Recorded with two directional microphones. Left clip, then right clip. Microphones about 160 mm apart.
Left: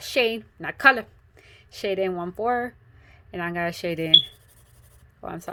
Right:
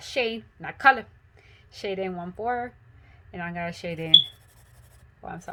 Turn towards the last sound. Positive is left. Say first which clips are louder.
# left 3 dB
turn(degrees=55)  # may be behind; listen again after turning